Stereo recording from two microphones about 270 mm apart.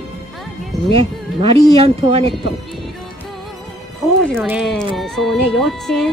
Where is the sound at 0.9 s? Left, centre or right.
Centre.